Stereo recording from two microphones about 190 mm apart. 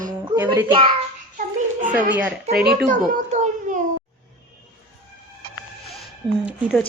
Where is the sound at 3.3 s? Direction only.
40° right (ahead or behind).